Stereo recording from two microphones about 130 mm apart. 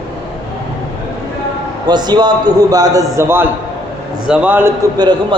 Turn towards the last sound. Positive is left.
turn(degrees=-35)  # may be behind; listen again after turning